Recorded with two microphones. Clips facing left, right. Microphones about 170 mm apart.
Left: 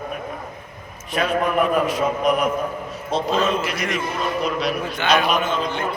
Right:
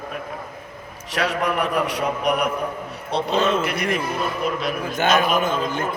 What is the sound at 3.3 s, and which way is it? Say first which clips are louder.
Speech: right 2 dB; 30° right (ahead or behind).